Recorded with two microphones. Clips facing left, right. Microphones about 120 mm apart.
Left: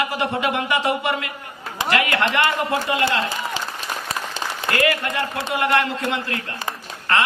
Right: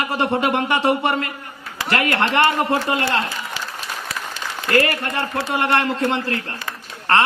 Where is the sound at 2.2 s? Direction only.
30° right (ahead or behind).